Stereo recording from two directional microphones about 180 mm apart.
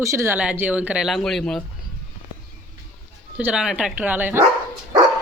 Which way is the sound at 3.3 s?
5° right (ahead or behind).